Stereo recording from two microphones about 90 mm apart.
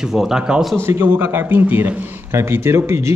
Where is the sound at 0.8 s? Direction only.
25° right (ahead or behind).